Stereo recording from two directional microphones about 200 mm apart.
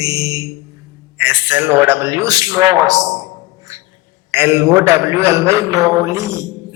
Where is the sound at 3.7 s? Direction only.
15° right (ahead or behind).